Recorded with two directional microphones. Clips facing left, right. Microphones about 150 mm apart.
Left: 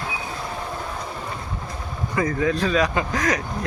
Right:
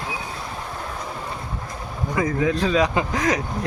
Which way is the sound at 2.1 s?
10° right (ahead or behind).